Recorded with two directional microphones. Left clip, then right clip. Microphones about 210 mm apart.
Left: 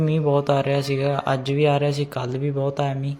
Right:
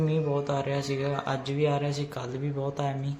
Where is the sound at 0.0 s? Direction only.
40° left (ahead or behind).